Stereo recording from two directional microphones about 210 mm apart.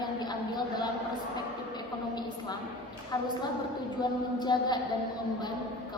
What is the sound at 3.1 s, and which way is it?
A woman's voice, 20° left (ahead or behind).